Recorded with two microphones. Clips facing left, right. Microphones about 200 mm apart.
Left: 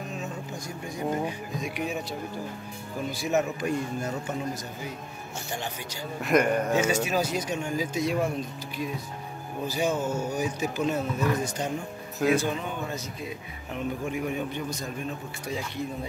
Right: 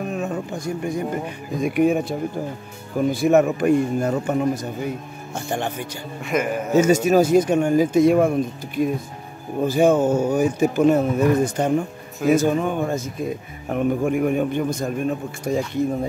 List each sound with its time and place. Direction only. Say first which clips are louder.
0.0 s a sound: right 10 dB; 60° right (ahead or behind)
1.6 s speech: right 14 dB; 55° right (ahead or behind)
6.2 s a man's voice: even; centre (ahead or behind)
6.7 s speech: right 9 dB; 40° right (ahead or behind)